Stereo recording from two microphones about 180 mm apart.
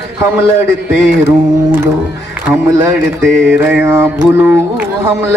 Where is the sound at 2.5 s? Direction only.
15° right (ahead or behind).